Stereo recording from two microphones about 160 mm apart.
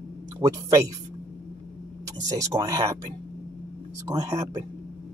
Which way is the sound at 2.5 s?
20° right (ahead or behind).